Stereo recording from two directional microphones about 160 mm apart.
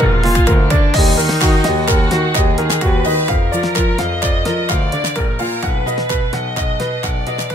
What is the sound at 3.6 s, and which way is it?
Music, centre (ahead or behind).